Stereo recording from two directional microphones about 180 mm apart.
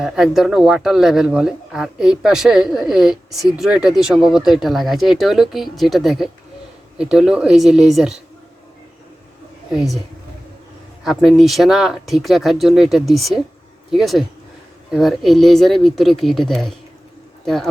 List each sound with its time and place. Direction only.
0.0 s speech: centre (ahead or behind)
9.7 s speech: centre (ahead or behind)
11.0 s speech: centre (ahead or behind)